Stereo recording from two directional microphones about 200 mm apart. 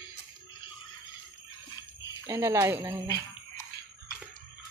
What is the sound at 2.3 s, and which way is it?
Speech, 15° right (ahead or behind).